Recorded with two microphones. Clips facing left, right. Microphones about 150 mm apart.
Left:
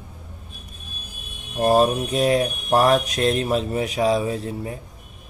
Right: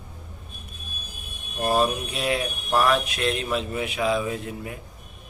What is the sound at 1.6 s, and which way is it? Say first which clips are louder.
Mantra: left 5 dB; 40° left (ahead or behind).